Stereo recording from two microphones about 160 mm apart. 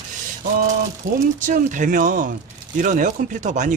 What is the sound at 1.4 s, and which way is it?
Speech, 50° right (ahead or behind).